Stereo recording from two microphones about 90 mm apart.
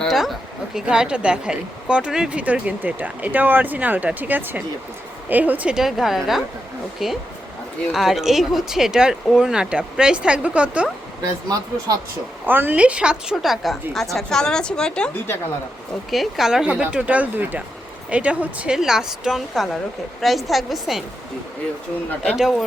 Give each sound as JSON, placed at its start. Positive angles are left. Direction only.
{"t": 0.1, "sound": "a woman's voice", "side_deg": 0}
{"t": 5.7, "sound": "a woman's voice", "side_deg": -5}
{"t": 11.2, "sound": "speech", "side_deg": -40}
{"t": 12.5, "sound": "a woman's voice", "side_deg": -20}